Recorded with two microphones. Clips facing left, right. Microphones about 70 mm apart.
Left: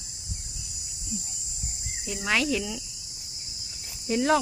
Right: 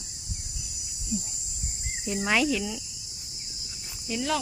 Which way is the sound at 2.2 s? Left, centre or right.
Centre.